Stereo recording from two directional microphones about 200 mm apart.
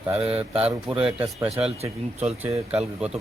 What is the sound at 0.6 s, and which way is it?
Speech, 5° right (ahead or behind).